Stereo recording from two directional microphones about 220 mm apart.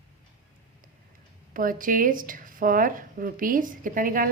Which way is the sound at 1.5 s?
40° right (ahead or behind).